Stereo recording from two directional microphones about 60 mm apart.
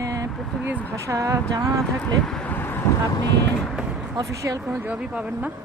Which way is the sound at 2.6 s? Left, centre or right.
Left.